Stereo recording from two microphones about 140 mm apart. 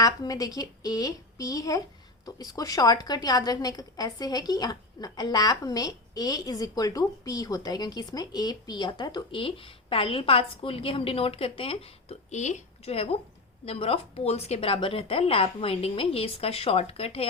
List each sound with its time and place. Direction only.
0.0 s a woman's voice: 25° left (ahead or behind); by 17.2 s 45° left (ahead or behind)